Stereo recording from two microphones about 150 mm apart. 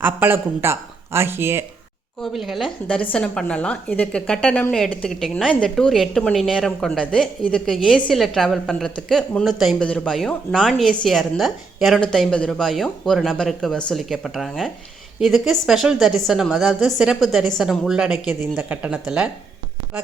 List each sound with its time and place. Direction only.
0.0 s speech: 15° right (ahead or behind)
2.2 s a woman's voice: centre (ahead or behind)